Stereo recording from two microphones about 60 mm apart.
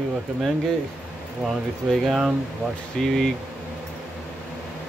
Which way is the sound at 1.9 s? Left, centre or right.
Centre.